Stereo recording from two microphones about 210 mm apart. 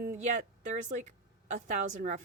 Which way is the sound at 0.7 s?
35° right (ahead or behind).